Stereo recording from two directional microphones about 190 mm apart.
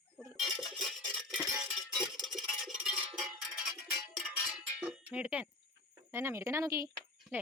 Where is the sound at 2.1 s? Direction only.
Centre (ahead or behind).